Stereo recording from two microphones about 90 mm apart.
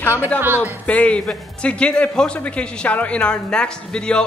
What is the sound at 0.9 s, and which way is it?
A man's voice, 15° left (ahead or behind).